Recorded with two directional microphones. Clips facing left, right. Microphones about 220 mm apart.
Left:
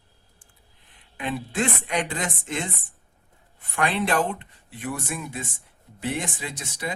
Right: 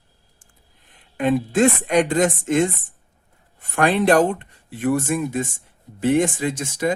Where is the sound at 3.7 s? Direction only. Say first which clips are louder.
Right 8 dB; 45° right (ahead or behind).